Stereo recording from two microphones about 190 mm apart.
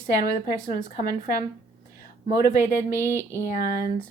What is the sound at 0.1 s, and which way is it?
Speech, 15° right (ahead or behind).